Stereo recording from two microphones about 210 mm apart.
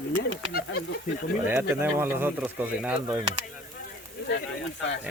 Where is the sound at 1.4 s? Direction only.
10° right (ahead or behind).